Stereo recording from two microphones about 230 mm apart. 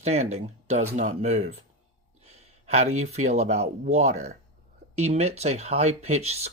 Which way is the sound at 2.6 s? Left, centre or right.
Right.